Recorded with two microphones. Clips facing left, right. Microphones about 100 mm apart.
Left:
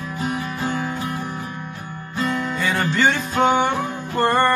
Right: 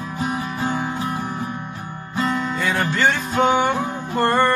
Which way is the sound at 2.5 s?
Centre (ahead or behind).